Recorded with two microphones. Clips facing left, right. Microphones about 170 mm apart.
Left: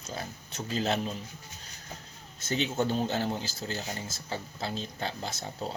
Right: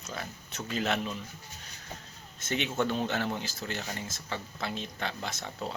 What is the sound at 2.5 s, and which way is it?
Speech, 35° left (ahead or behind).